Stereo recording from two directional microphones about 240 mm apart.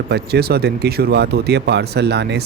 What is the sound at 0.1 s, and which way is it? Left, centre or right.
Speech, right.